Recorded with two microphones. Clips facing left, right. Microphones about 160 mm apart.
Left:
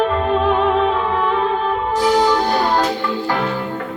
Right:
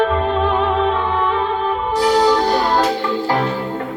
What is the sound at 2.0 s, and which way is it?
Music, 10° right (ahead or behind).